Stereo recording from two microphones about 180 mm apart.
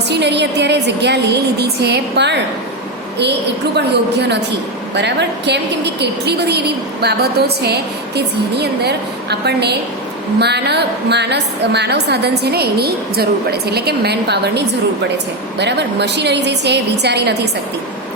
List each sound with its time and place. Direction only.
0.1 s a woman's voice: 70° right (ahead or behind)
3.8 s a woman's voice: 70° right (ahead or behind)